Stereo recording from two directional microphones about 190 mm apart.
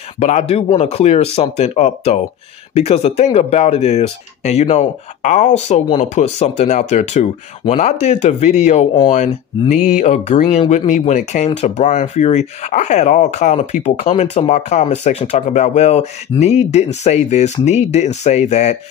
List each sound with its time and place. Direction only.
0.2 s speech: 35° left (ahead or behind)